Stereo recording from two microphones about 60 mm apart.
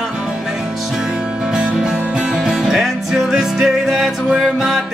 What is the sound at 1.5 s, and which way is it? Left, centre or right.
Music, centre.